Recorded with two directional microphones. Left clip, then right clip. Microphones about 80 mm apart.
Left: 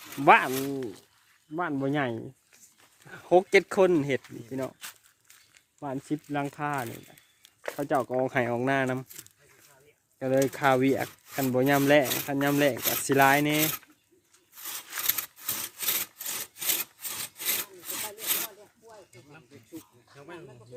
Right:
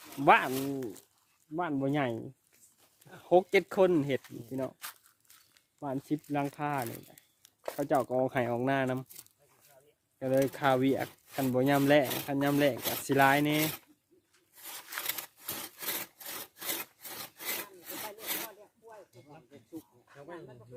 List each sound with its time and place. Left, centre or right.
0.0 s a sound: right
0.3 s speech: left
0.6 s speech: centre
1.8 s speech: left
4.8 s walk: centre
5.8 s speech: centre
7.1 s a sound: centre
8.1 s speech: centre
10.2 s speech: left
15.0 s a sound: right
15.8 s sawing: right
18.6 s a sound: centre